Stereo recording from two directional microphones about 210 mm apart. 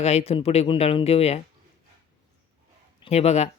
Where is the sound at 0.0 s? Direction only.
30° left (ahead or behind).